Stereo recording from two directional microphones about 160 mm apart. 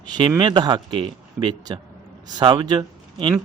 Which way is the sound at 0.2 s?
30° right (ahead or behind).